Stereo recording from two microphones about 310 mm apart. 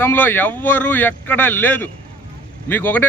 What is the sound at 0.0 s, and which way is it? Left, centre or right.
Speech, centre.